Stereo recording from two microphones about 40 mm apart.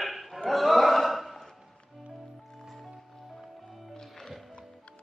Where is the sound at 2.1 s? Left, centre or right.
Centre.